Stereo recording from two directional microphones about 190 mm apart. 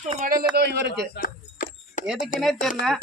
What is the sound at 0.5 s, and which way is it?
Speech, 60° right (ahead or behind).